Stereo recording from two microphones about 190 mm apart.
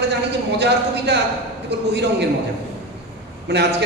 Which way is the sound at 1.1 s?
65° right (ahead or behind).